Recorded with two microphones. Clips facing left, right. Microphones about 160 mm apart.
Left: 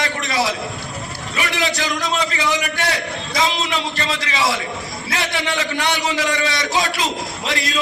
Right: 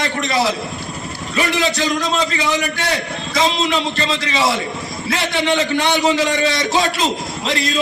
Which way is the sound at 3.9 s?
25° right (ahead or behind).